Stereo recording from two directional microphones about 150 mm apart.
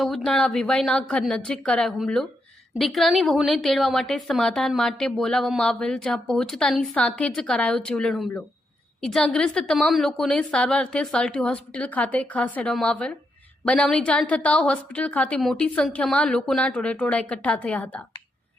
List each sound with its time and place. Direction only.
0.0 s a woman's voice: 5° left (ahead or behind)